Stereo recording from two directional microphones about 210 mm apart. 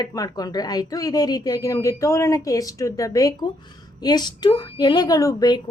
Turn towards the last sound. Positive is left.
turn(degrees=20)  # may be behind; listen again after turning